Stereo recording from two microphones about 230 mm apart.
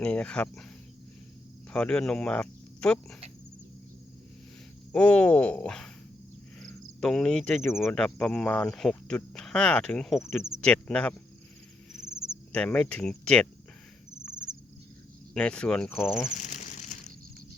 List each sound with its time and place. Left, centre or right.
0.0 s speech: centre
1.7 s speech: centre
4.9 s speech: centre
6.6 s cricket: centre
7.8 s speech: centre
12.3 s speech: centre
14.2 s cricket: centre
15.3 s speech: centre
16.3 s crumpling: left